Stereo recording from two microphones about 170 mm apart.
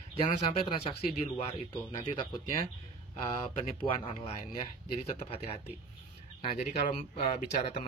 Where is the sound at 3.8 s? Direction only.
30° left (ahead or behind).